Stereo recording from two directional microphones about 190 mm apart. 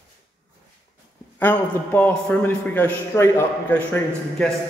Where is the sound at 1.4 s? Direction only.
10° left (ahead or behind).